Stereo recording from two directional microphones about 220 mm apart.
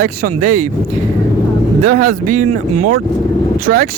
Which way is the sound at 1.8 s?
90° right.